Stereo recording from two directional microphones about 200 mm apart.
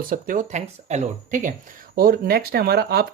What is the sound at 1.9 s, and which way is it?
Speech, 50° right (ahead or behind).